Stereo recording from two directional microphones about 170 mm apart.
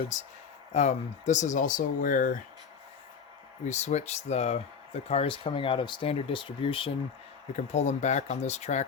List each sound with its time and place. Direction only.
0.1 s speech: 45° left (ahead or behind)
3.7 s speech: 40° left (ahead or behind)
7.5 s speech: 45° left (ahead or behind)